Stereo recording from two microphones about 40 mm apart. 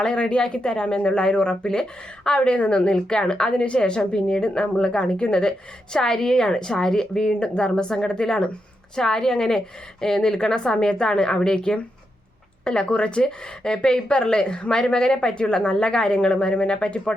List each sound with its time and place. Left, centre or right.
0.0 s speech: left